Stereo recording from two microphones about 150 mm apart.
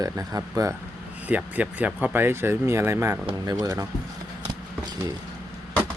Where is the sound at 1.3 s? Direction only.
10° right (ahead or behind).